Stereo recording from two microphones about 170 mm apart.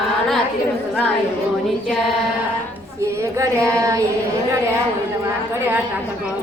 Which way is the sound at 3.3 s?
20° right (ahead or behind).